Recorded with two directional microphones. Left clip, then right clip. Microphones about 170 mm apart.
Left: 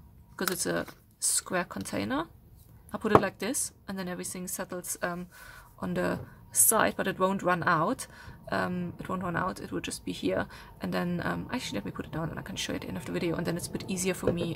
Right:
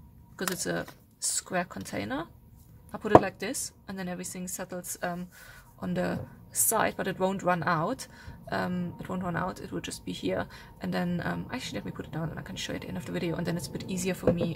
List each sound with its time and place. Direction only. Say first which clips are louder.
1.3 s speech: even; 30° left (ahead or behind)